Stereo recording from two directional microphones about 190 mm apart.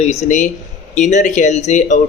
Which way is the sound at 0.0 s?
40° left (ahead or behind).